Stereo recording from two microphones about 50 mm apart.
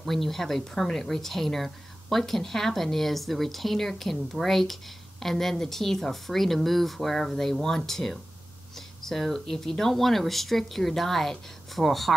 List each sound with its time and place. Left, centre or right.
0.0 s speech: centre